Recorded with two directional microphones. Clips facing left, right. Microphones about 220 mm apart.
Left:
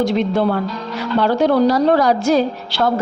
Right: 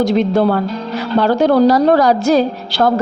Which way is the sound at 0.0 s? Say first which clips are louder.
Right 3 dB; 40° right (ahead or behind).